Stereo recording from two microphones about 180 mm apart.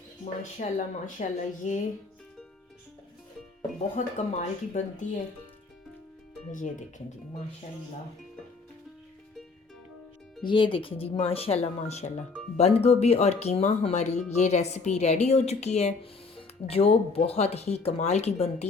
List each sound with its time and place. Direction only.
0.6 s speech: 45° left (ahead or behind)
3.9 s speech: 40° left (ahead or behind)
6.5 s speech: 45° left (ahead or behind)
10.4 s speech: 30° left (ahead or behind)